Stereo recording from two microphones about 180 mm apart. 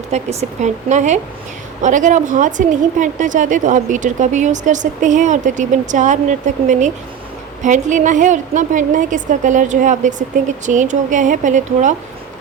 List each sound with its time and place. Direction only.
0.1 s a woman's voice: 35° right (ahead or behind)